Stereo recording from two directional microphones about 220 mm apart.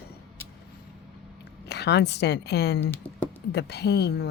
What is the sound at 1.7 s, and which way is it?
A woman's voice, 50° left (ahead or behind).